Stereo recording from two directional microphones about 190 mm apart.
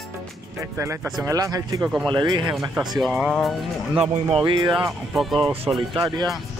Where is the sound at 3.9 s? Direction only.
30° right (ahead or behind).